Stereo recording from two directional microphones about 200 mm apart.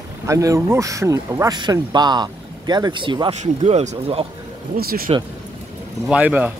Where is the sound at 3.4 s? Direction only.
35° right (ahead or behind).